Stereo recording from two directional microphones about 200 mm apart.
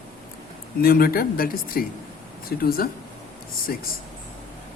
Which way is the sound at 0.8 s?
50° left (ahead or behind).